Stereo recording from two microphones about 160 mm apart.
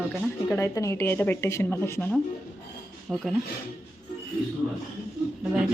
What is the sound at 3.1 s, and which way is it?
Speech, 5° right (ahead or behind).